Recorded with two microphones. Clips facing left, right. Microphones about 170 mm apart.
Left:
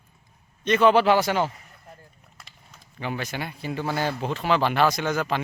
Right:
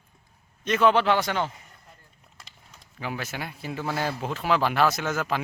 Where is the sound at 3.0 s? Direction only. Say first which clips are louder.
Left 2 dB; 5° right (ahead or behind).